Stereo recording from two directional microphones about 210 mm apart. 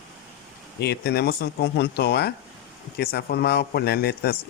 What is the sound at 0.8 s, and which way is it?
Speech, 50° left (ahead or behind).